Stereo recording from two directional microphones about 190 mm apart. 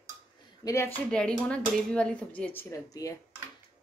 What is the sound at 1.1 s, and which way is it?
Speech, 5° left (ahead or behind).